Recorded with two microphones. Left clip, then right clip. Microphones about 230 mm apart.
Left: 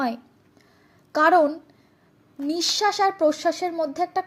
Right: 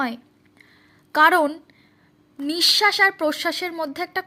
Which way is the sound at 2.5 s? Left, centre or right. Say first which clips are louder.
Right 5 dB; right.